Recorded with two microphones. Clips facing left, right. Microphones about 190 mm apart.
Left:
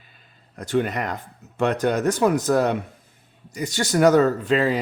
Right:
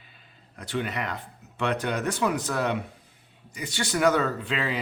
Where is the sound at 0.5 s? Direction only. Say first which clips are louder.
Left 7 dB; 45° left (ahead or behind).